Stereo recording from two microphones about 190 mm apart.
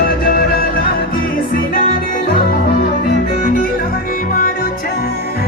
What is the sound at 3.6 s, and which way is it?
Music, 50° left (ahead or behind).